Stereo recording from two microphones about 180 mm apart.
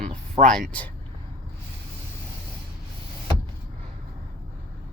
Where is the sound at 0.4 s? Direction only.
5° left (ahead or behind).